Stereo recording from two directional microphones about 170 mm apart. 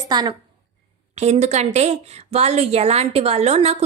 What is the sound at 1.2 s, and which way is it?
A woman's voice, 40° right (ahead or behind).